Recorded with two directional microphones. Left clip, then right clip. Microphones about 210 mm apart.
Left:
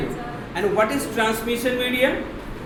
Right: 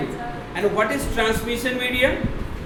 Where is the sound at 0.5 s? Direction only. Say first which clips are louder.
Left 1 dB; 25° right (ahead or behind).